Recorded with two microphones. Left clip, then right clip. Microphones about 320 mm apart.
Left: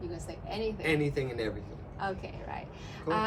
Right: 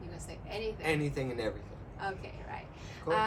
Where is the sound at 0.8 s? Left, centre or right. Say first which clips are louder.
Left 3 dB; centre.